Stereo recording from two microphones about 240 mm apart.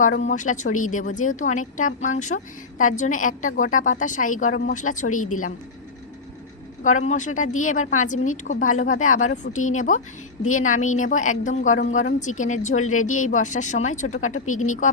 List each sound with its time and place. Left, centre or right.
0.0 s a woman's voice: left
5.1 s speech: left
6.8 s a woman's voice: left
14.3 s speech: left